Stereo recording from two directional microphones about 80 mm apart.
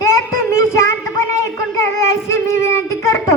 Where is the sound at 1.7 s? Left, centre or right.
Left.